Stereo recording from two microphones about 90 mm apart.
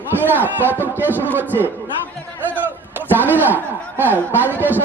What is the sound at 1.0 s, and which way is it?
Speech, 20° left (ahead or behind).